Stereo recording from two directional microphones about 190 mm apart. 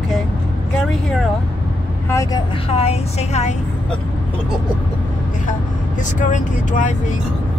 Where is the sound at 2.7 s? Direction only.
35° left (ahead or behind).